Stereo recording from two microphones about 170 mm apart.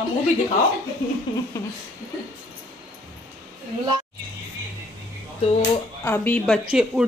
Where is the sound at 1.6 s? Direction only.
20° left (ahead or behind).